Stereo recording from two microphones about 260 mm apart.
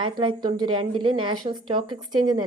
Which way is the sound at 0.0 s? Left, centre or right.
Centre.